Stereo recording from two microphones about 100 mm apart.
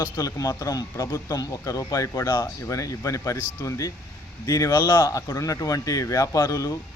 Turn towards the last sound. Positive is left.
turn(degrees=35)  # may be behind; listen again after turning